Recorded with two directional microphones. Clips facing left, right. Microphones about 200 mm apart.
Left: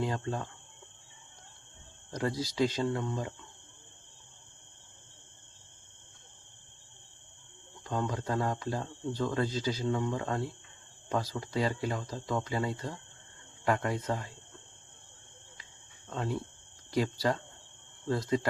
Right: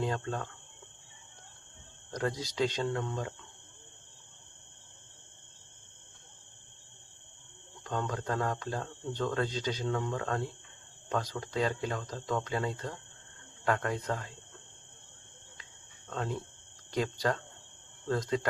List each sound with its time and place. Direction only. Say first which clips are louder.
0.0 s speech: even; 10° left (ahead or behind)
2.0 s speech: left 1 dB; 5° left (ahead or behind)
7.9 s speech: left 1 dB; 5° left (ahead or behind)
16.0 s speech: left 1 dB; 5° left (ahead or behind)